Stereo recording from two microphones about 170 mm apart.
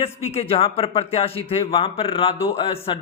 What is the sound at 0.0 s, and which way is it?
A man's voice, 35° left (ahead or behind).